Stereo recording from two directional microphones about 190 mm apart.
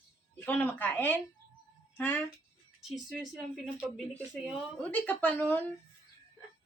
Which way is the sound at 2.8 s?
Centre (ahead or behind).